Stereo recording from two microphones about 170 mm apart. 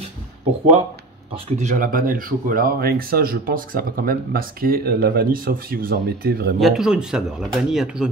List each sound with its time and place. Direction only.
1.3 s speech: 45° right (ahead or behind); by 6.5 s 65° right (ahead or behind)
6.6 s speech: centre (ahead or behind)